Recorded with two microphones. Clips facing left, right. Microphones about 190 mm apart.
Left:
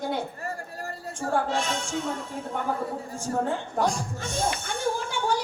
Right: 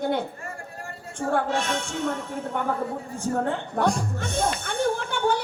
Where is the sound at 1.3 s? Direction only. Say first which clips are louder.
Right 1 dB; 60° right (ahead or behind).